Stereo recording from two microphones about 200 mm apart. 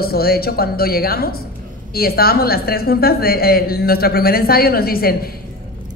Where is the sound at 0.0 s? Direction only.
50° left (ahead or behind).